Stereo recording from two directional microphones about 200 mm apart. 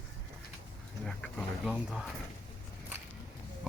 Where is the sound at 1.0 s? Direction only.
Centre (ahead or behind).